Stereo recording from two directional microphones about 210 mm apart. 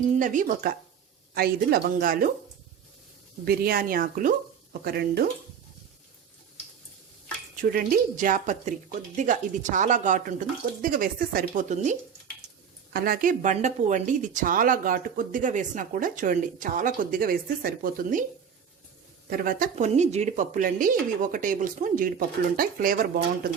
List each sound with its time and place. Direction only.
0.2 s speech: 40° right (ahead or behind)
3.4 s speech: 45° right (ahead or behind)
7.5 s speech: 40° right (ahead or behind)
19.3 s speech: 40° right (ahead or behind)